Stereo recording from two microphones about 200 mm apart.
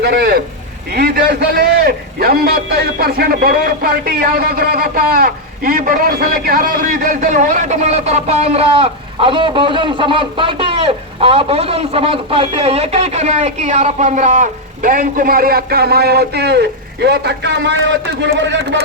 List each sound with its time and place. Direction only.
0.0 s a man's voice: 50° right (ahead or behind)